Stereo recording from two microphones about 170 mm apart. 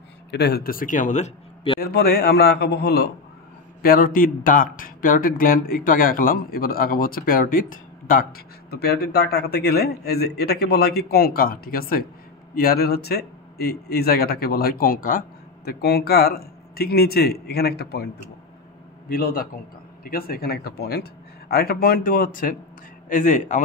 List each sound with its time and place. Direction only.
0.3 s speech: 75° left (ahead or behind); by 1.3 s 45° left (ahead or behind)
1.8 s speech: 60° left (ahead or behind)
3.8 s speech: 55° left (ahead or behind)
19.0 s speech: 60° left (ahead or behind)